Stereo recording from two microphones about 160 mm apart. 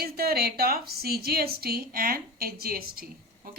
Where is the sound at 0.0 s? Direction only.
75° right (ahead or behind).